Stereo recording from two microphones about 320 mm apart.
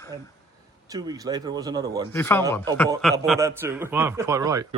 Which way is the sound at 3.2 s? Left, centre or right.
Centre.